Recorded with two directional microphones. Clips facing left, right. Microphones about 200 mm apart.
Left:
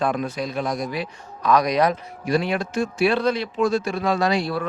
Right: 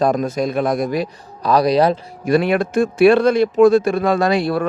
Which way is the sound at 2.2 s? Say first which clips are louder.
Right 6 dB; 60° right (ahead or behind).